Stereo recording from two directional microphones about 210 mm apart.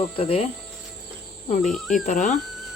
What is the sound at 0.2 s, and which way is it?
Cricket, 30° left (ahead or behind).